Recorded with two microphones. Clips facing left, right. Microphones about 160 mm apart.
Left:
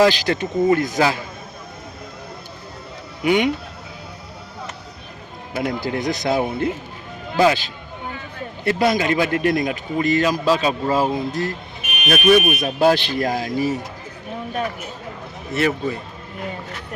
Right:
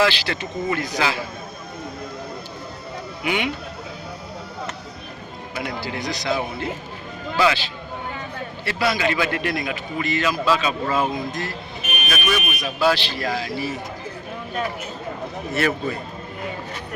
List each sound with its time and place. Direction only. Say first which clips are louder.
0.0 s speech: left 5 dB; 45° left (ahead or behind)
3.2 s speech: left 7 dB; 45° left (ahead or behind)
5.5 s a man's voice: left 6 dB; 50° left (ahead or behind)
12.0 s speech: left 10 dB; 60° left (ahead or behind)
15.5 s a man's voice: left 2 dB; 20° left (ahead or behind)